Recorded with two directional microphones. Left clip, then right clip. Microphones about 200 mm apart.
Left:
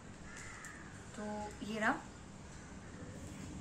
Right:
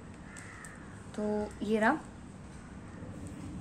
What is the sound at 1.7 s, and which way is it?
Speech, 45° right (ahead or behind).